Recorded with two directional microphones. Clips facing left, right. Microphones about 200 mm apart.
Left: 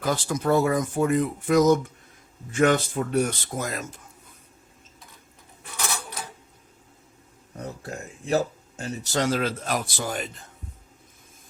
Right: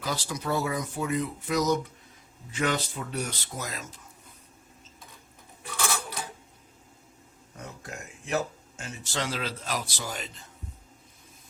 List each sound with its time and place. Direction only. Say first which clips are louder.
0.0 s speech: left 7 dB; 50° left (ahead or behind)
7.5 s speech: left 6 dB; 35° left (ahead or behind); by 10.4 s 50° left (ahead or behind)